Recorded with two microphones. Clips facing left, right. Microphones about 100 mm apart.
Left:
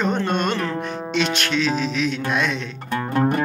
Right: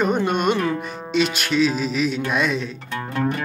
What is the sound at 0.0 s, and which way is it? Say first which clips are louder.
Music: right 2 dB; 10° right (ahead or behind).